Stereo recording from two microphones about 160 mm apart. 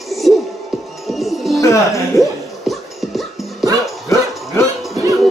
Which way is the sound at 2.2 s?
Centre (ahead or behind).